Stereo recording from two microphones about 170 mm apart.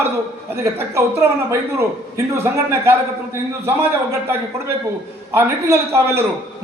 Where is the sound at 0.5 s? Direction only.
15° right (ahead or behind).